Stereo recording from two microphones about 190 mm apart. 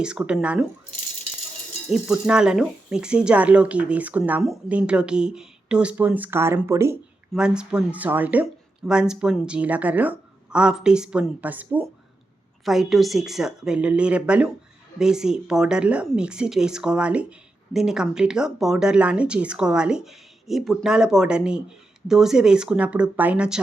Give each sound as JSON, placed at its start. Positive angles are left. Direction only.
{"t": 0.0, "sound": "speech", "side_deg": -5}
{"t": 1.9, "sound": "speech", "side_deg": -5}